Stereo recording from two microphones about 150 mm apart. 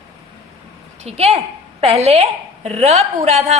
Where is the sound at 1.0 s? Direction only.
45° right (ahead or behind).